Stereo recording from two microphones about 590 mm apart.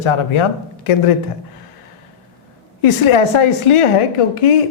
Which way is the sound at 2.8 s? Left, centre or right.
Left.